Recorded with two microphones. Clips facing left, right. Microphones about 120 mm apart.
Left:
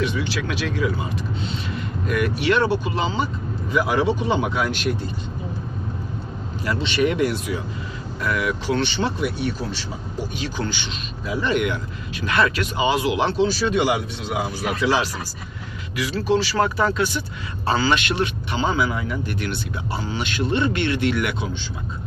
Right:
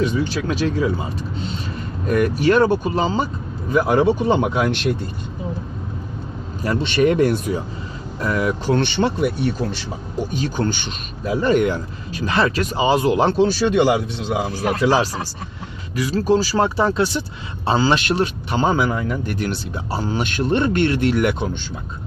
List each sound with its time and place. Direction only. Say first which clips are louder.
0.0 s speech: right 4 dB; 40° right (ahead or behind)
6.7 s speech: right 5 dB; 50° right (ahead or behind)
8.2 s speech: right 3 dB; 30° right (ahead or behind)
8.6 s speech: right 4 dB; 50° right (ahead or behind)
14.6 s speech: right 4 dB; 40° right (ahead or behind)